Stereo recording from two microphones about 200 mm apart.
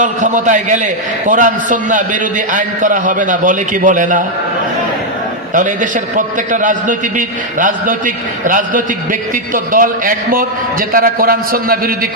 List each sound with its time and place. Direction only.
0.0 s a man's voice: 40° right (ahead or behind)
5.5 s a man's voice: 40° right (ahead or behind)